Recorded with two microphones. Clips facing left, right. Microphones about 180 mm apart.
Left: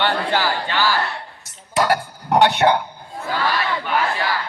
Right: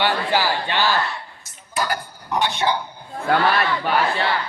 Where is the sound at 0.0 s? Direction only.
10° right (ahead or behind).